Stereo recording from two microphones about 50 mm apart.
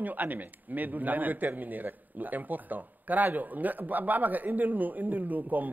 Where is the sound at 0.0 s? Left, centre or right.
Right.